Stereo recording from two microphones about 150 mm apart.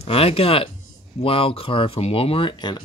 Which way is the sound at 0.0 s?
40° left (ahead or behind).